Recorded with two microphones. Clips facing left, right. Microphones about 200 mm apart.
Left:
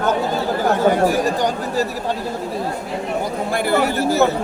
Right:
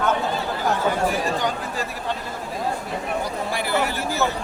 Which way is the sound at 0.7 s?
45° left (ahead or behind).